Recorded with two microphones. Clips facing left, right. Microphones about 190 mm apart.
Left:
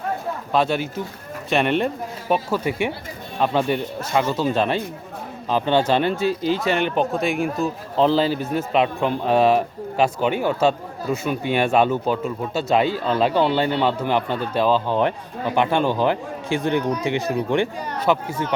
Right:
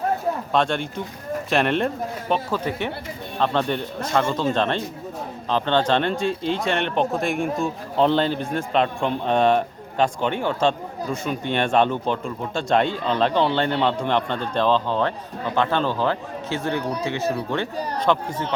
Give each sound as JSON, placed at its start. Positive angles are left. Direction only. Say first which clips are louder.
{"t": 0.5, "sound": "speech", "louder": "left 4 dB", "side_deg": 5}